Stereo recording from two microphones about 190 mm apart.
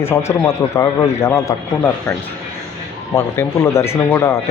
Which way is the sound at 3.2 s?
15° left (ahead or behind).